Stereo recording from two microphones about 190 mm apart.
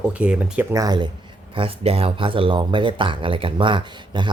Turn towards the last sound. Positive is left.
turn(degrees=-25)  # may be behind; listen again after turning